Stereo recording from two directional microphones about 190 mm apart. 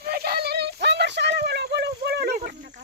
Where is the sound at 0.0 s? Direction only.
55° right (ahead or behind).